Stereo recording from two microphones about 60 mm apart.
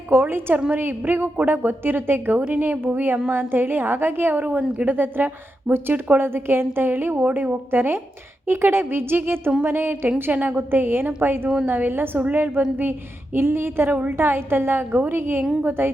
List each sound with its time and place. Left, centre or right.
0.1 s a woman's voice: right